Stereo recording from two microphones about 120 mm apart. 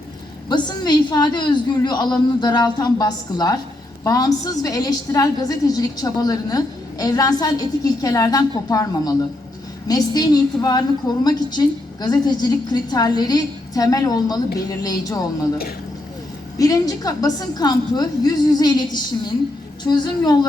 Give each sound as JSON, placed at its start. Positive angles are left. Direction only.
{"t": 0.4, "sound": "a woman's voice", "side_deg": 35}
{"t": 16.6, "sound": "a woman's voice", "side_deg": 30}